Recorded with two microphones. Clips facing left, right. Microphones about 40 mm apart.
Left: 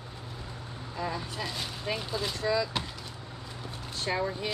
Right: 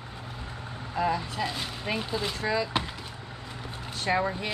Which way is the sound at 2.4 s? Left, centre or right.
Right.